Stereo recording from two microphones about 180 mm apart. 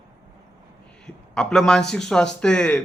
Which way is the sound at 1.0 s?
5° left (ahead or behind).